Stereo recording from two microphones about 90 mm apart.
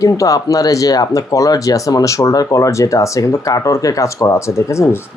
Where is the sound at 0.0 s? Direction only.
35° left (ahead or behind).